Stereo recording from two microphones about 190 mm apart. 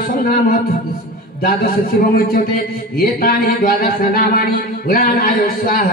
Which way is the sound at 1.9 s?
50° left (ahead or behind).